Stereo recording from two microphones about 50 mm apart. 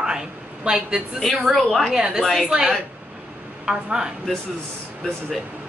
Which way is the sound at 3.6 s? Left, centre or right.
Centre.